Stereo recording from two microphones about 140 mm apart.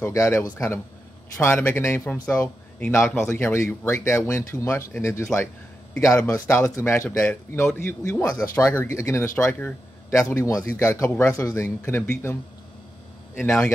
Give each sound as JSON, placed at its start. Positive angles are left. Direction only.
{"t": 0.0, "sound": "speech", "side_deg": 20}